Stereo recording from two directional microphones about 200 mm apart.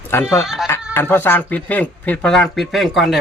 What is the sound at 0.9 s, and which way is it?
Speech, 10° left (ahead or behind).